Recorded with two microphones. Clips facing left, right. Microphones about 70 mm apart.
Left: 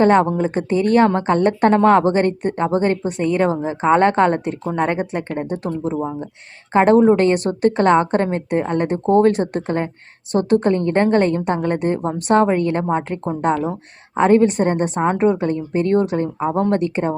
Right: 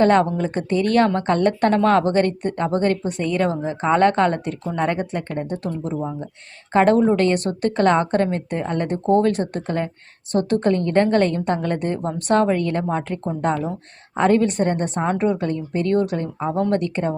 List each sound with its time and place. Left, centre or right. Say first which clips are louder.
0.0 s a woman's voice: left 2 dB; left
9.0 s speech: left 3 dB; left
9.3 s a woman's voice: left 3 dB; left